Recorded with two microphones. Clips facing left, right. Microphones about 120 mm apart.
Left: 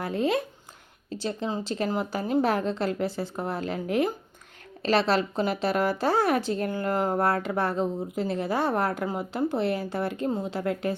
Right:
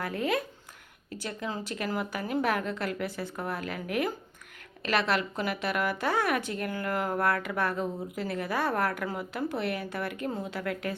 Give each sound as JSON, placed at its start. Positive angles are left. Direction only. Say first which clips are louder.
{"t": 0.0, "sound": "speech", "louder": "left 4 dB", "side_deg": 25}